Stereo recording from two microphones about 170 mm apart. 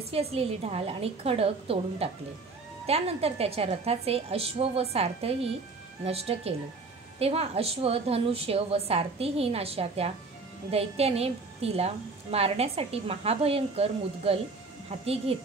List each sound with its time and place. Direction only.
0.1 s a woman's voice: 35° right (ahead or behind)